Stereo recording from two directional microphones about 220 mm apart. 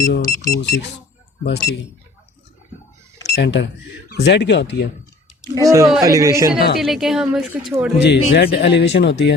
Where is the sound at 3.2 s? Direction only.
50° left (ahead or behind).